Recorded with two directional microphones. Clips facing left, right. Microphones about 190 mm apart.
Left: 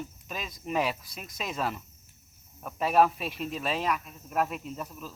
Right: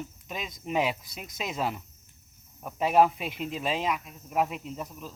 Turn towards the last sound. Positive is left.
turn(degrees=-15)  # may be behind; listen again after turning